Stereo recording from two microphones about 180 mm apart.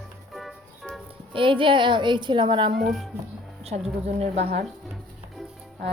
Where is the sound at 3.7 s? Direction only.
35° right (ahead or behind).